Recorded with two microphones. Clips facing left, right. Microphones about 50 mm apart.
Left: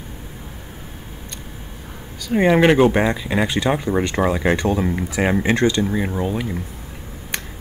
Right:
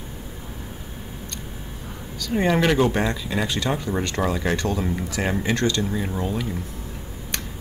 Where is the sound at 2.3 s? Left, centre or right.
Left.